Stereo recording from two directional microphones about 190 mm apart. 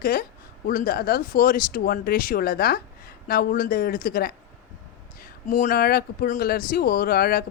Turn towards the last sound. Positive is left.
turn(degrees=55)  # may be behind; listen again after turning